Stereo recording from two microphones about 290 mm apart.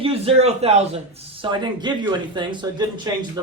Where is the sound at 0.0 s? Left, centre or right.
Centre.